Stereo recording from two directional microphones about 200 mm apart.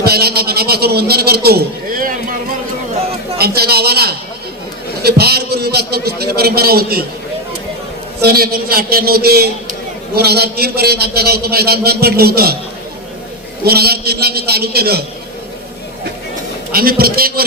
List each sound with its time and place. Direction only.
0.0 s a man's voice: 50° right (ahead or behind)
3.3 s a man's voice: 50° right (ahead or behind)
8.2 s a man's voice: 50° right (ahead or behind)
13.7 s a man's voice: 50° right (ahead or behind)
16.7 s a man's voice: 50° right (ahead or behind)